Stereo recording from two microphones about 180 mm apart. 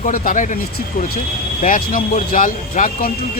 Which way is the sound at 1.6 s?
45° left (ahead or behind).